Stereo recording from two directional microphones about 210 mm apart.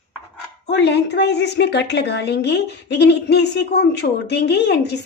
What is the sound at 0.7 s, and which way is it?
A woman's voice, 55° left (ahead or behind).